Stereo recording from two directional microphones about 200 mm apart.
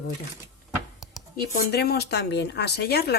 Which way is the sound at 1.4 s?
50° left (ahead or behind).